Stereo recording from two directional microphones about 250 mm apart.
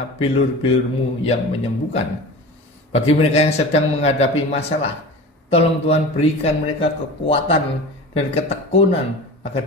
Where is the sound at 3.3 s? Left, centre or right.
Left.